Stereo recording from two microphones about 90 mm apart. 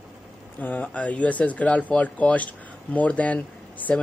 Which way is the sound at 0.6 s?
20° left (ahead or behind).